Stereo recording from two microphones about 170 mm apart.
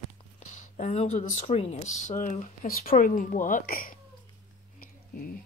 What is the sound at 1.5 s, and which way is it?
Speech, 35° left (ahead or behind).